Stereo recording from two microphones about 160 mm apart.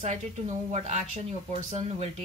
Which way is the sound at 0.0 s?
45° right (ahead or behind).